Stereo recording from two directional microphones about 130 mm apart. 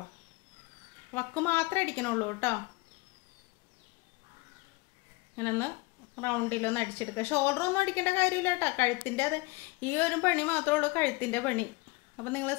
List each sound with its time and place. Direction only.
1.1 s a woman's voice: 15° left (ahead or behind)
5.3 s a woman's voice: 15° left (ahead or behind)